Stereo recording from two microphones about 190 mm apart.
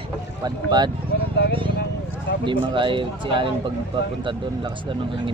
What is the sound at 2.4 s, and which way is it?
Speech, 25° right (ahead or behind).